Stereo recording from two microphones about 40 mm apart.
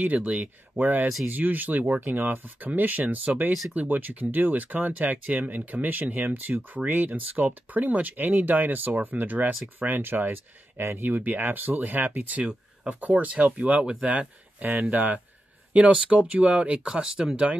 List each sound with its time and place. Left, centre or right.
0.0 s speech: right
0.7 s speech: right
2.1 s speech: right
11.1 s speech: right; by 17.4 s centre